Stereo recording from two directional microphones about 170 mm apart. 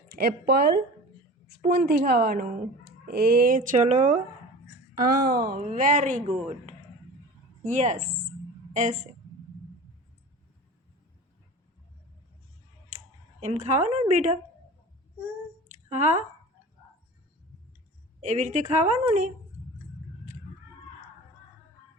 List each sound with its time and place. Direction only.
0.2 s speech: 70° right (ahead or behind)
1.9 s a woman's voice: 70° right (ahead or behind); by 4.2 s 45° right (ahead or behind)
4.9 s a woman's voice: 60° right (ahead or behind)
5.5 s a woman's voice: 45° right (ahead or behind)
13.4 s a woman's voice: 40° right (ahead or behind)
15.9 s speech: 45° right (ahead or behind)
18.2 s speech: 45° right (ahead or behind)